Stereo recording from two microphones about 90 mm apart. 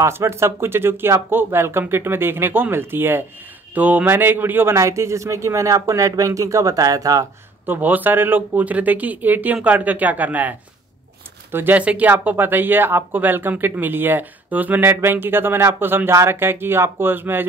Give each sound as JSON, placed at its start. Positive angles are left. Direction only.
{"t": 0.0, "sound": "speech", "side_deg": -30}
{"t": 7.6, "sound": "speech", "side_deg": -20}
{"t": 11.5, "sound": "speech", "side_deg": -20}